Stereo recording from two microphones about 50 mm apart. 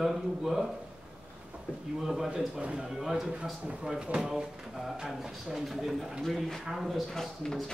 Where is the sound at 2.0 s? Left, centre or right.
Centre.